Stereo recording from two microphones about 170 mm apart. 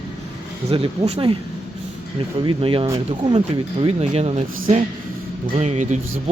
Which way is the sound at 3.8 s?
35° right (ahead or behind).